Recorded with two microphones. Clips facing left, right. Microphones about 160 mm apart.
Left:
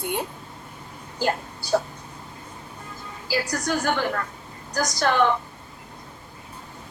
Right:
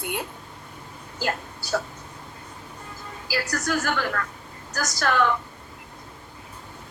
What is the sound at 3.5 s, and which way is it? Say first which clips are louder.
A woman's voice: even; 20° left (ahead or behind).